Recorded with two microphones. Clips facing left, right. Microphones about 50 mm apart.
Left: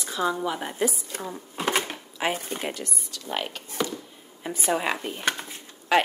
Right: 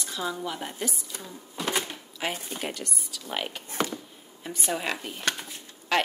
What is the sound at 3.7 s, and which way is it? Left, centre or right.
Speech, right.